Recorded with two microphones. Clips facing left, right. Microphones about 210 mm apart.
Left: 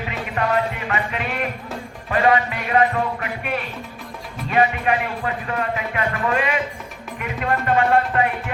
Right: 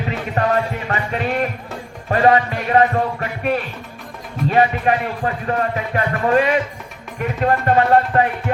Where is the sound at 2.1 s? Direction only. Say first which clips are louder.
Right 3 dB; 40° right (ahead or behind).